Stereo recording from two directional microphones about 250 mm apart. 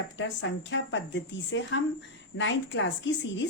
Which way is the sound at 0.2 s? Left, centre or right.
Left.